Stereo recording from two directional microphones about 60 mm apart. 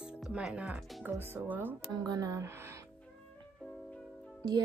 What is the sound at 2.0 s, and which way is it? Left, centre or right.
Speech, right.